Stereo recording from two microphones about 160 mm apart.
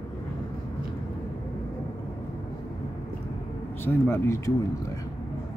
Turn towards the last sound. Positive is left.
turn(degrees=20)  # may be behind; listen again after turning